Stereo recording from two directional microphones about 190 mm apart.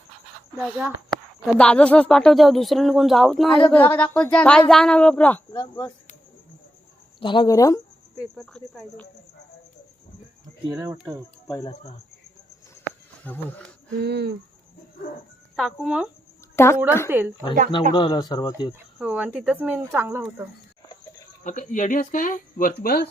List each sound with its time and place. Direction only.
0.5 s speech: 5° right (ahead or behind)
1.5 s speech: 5° left (ahead or behind)
7.2 s speech: 25° left (ahead or behind)
8.2 s speech: centre (ahead or behind)
10.7 s speech: 15° right (ahead or behind)
11.4 s speech: 20° left (ahead or behind)
12.8 s insect: 5° left (ahead or behind)
14.0 s cricket: 60° right (ahead or behind)
15.5 s speech: centre (ahead or behind)
16.6 s speech: 15° left (ahead or behind)
17.1 s speech: 10° right (ahead or behind)
17.9 s speech: 25° left (ahead or behind)
18.9 s speech: 5° right (ahead or behind)
21.4 s speech: 40° left (ahead or behind)